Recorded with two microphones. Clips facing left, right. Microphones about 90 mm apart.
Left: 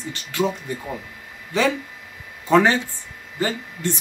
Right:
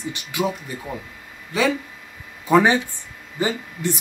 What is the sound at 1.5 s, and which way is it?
Speech, 5° right (ahead or behind).